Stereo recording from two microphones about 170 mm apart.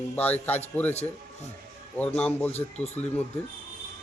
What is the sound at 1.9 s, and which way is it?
Speech, 10° left (ahead or behind).